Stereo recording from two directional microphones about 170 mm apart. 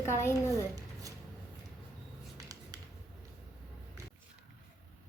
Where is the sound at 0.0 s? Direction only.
15° left (ahead or behind).